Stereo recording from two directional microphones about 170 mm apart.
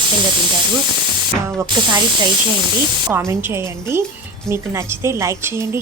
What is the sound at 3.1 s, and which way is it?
Speech, 15° right (ahead or behind).